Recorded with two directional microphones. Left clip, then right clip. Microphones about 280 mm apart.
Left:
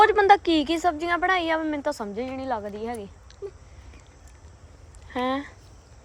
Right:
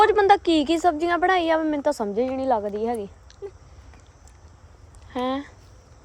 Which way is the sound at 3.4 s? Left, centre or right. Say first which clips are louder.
Even; centre.